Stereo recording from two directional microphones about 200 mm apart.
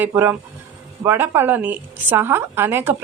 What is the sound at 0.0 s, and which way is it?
A woman's voice, 10° right (ahead or behind).